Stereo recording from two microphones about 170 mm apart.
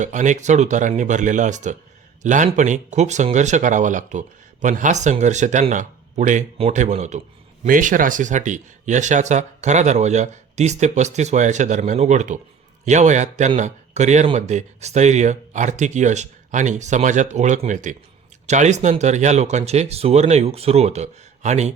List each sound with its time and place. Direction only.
0.0 s speech: 45° right (ahead or behind)